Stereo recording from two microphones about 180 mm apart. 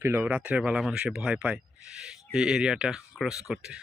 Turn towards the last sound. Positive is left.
turn(degrees=0)  # may be behind; listen again after turning